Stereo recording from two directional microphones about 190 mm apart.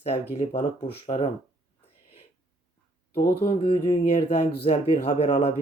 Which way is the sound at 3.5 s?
30° left (ahead or behind).